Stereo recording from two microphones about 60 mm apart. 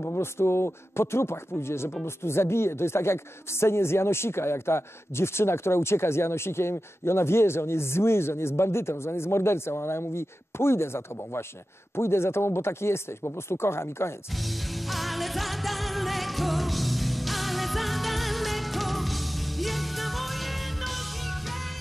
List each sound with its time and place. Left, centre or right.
0.0 s a woman's voice: left
14.4 s music: centre